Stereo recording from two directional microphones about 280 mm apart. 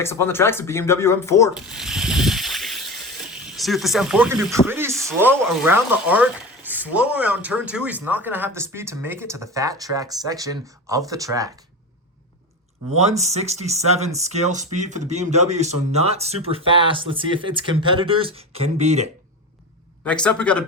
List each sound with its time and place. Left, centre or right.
0.0 s speech: centre
1.7 s boat: centre
3.5 s speech: centre
13.0 s speech: right
20.1 s speech: centre